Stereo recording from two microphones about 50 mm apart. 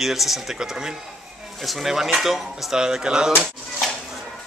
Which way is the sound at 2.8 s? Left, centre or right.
Centre.